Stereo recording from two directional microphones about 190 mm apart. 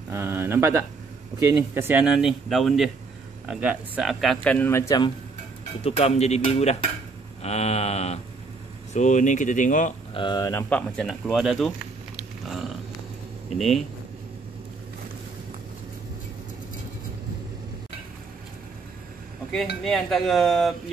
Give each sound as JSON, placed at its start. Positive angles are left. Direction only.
{"t": 0.1, "sound": "a man's voice", "side_deg": -15}
{"t": 5.9, "sound": "speech", "side_deg": 35}
{"t": 10.1, "sound": "speech", "side_deg": 20}
{"t": 10.7, "sound": "a man's voice", "side_deg": 5}
{"t": 13.6, "sound": "a man's voice", "side_deg": 0}
{"t": 19.8, "sound": "a man's voice", "side_deg": 0}